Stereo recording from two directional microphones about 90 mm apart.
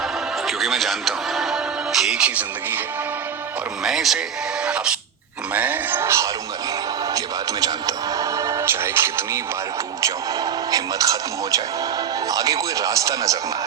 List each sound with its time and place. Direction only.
0.4 s music: centre (ahead or behind)
3.8 s speech: 5° right (ahead or behind)
5.5 s music: 20° right (ahead or behind)
7.6 s music: 40° right (ahead or behind)
10.7 s speech: 40° right (ahead or behind)